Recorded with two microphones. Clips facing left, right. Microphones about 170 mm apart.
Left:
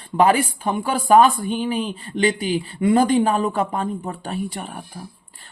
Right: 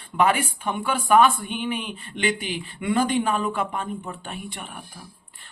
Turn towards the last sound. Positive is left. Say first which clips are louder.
# left 8 dB
turn(degrees=35)  # may be behind; listen again after turning